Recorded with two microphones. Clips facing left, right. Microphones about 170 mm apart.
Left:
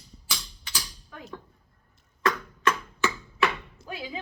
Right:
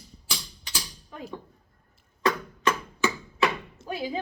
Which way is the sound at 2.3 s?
15° right (ahead or behind).